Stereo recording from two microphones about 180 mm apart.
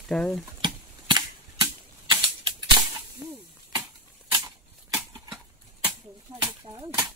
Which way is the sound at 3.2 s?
10° right (ahead or behind).